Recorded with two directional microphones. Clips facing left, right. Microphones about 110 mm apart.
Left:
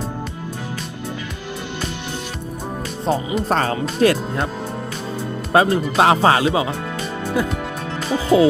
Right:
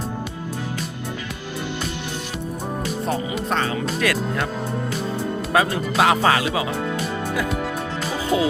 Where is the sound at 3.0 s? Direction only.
30° left (ahead or behind).